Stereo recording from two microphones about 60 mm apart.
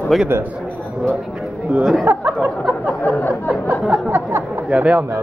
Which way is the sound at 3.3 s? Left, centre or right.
Right.